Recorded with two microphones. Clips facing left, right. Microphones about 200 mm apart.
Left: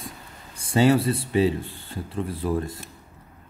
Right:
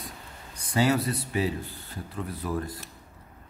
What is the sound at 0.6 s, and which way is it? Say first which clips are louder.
Speech: left 5 dB; 30° left (ahead or behind).